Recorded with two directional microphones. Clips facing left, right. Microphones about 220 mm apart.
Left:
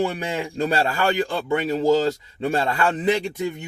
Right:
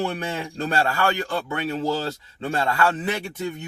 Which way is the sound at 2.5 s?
20° left (ahead or behind).